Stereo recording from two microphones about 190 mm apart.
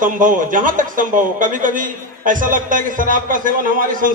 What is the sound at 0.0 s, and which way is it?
A man's voice, 45° right (ahead or behind).